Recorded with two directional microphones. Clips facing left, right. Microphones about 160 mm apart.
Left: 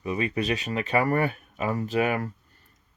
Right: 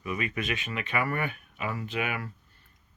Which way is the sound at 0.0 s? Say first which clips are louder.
Left 5 dB; 30° left (ahead or behind).